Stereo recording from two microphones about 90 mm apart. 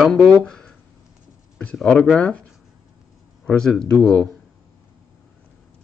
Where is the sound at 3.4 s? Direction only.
10° left (ahead or behind).